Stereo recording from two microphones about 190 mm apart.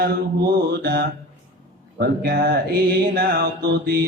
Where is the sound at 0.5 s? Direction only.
55° right (ahead or behind).